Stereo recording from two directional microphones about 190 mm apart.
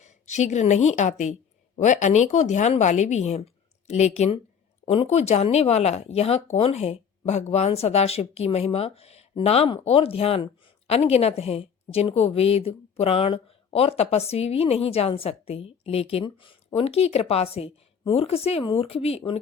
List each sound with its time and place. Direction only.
0.0 s a woman's voice: 40° left (ahead or behind)